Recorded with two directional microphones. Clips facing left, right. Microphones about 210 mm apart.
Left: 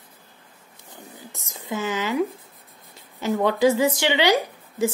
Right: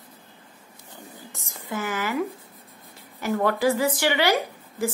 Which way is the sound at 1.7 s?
20° left (ahead or behind).